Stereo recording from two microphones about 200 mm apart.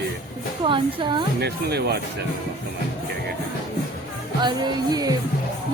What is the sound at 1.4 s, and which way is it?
Speech, 55° right (ahead or behind).